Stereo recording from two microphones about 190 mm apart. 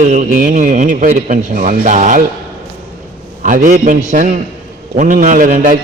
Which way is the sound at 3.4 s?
45° right (ahead or behind).